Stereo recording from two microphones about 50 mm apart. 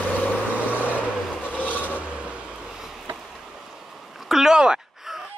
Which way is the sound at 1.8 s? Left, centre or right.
Right.